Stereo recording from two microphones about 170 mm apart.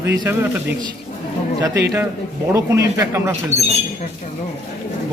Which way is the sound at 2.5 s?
20° right (ahead or behind).